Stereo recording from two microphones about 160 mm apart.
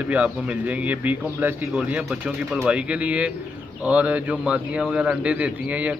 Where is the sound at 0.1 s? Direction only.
10° right (ahead or behind).